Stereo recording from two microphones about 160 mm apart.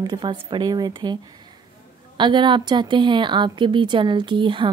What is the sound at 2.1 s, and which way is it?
A woman's voice, 30° right (ahead or behind).